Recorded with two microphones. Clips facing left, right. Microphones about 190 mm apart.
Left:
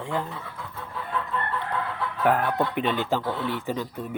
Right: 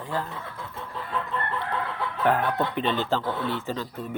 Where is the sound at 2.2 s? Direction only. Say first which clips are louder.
Left 1 dB; 10° left (ahead or behind).